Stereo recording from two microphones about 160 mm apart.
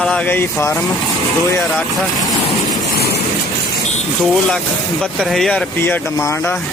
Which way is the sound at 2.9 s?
75° left (ahead or behind).